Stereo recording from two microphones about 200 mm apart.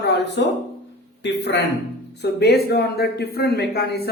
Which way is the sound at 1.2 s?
60° left (ahead or behind).